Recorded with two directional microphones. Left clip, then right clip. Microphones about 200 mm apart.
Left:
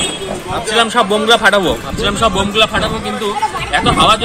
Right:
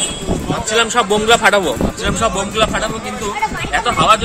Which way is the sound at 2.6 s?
10° right (ahead or behind).